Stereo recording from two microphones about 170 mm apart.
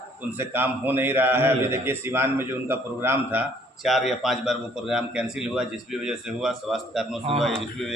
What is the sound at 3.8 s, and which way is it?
A man's voice, centre (ahead or behind).